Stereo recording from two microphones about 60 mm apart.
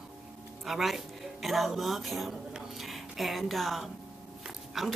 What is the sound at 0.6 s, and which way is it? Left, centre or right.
Speech, centre.